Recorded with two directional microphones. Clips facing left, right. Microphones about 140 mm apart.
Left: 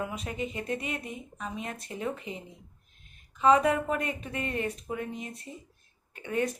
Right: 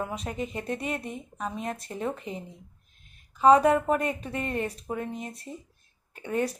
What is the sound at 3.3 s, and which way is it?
A woman's voice, 35° right (ahead or behind).